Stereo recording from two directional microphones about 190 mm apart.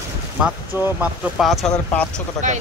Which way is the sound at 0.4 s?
5° right (ahead or behind).